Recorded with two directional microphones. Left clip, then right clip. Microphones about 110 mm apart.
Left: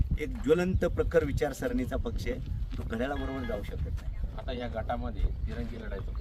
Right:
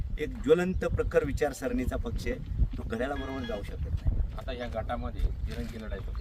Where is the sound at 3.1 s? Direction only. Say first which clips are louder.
Even; 40° right (ahead or behind).